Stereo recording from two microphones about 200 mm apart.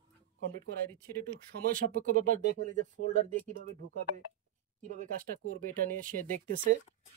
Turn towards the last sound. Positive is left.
turn(degrees=-40)  # may be behind; listen again after turning